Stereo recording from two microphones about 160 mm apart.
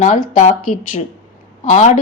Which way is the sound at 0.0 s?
50° left (ahead or behind).